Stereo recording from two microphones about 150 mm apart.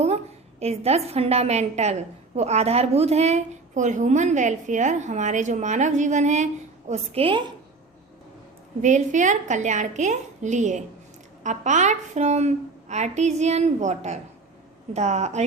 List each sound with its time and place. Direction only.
0.6 s a woman's voice: 45° right (ahead or behind)
8.8 s a woman's voice: 55° right (ahead or behind)